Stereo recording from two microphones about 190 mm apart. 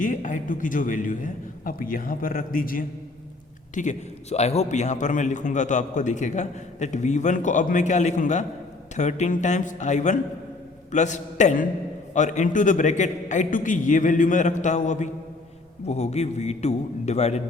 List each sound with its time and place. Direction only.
0.0 s a man's voice: 45° left (ahead or behind)